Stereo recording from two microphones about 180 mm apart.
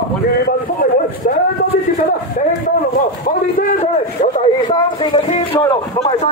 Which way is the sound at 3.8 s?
40° left (ahead or behind).